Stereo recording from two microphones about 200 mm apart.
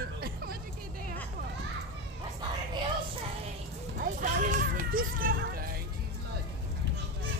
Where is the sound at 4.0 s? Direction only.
40° right (ahead or behind).